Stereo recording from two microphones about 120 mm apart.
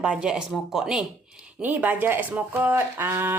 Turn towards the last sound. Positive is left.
turn(degrees=-20)  # may be behind; listen again after turning